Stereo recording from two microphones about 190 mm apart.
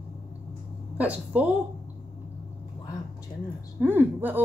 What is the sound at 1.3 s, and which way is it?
Speech, 5° right (ahead or behind).